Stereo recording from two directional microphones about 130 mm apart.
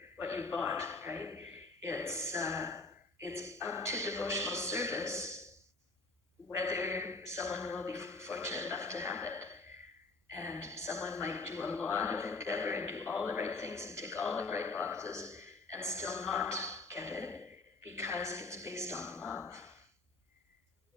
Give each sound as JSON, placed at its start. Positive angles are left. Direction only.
{"t": 0.3, "sound": "a man's voice", "side_deg": -20}
{"t": 6.7, "sound": "a woman's voice", "side_deg": -20}